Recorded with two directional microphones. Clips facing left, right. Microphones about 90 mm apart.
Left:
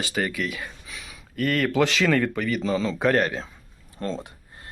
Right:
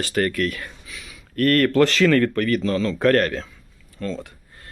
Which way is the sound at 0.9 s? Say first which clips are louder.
Even; 25° left (ahead or behind).